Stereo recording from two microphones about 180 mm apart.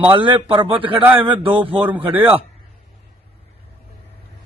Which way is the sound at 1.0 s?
10° right (ahead or behind).